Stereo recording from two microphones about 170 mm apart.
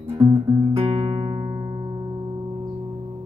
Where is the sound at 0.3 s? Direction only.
15° right (ahead or behind).